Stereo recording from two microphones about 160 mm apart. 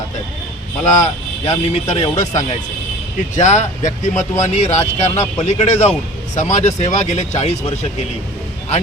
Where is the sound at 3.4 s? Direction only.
45° left (ahead or behind).